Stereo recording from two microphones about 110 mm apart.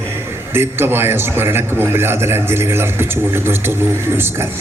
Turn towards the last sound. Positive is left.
turn(degrees=-20)  # may be behind; listen again after turning